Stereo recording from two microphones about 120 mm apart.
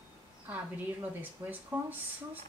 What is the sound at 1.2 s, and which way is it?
Speech, 15° right (ahead or behind).